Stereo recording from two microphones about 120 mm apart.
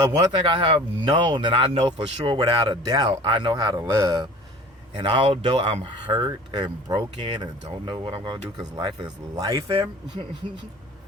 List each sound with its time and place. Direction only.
0.0 s speech: 45° right (ahead or behind)
4.9 s speech: 50° right (ahead or behind); by 9.9 s 30° right (ahead or behind)